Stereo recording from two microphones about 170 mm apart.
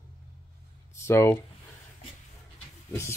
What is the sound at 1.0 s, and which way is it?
Speech, 15° left (ahead or behind).